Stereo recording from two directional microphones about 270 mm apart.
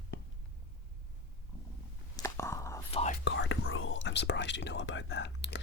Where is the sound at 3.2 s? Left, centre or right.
Left.